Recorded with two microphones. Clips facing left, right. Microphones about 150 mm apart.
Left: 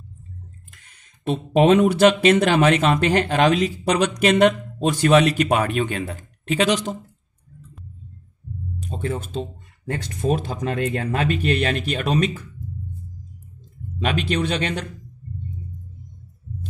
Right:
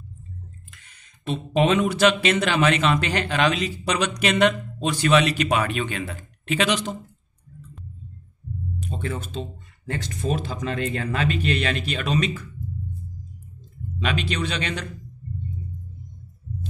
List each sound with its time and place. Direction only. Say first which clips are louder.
1.2 s speech: left 5 dB; 50° left (ahead or behind)
8.7 s speech: left 4 dB; 40° left (ahead or behind)
13.9 s speech: left 4 dB; 50° left (ahead or behind)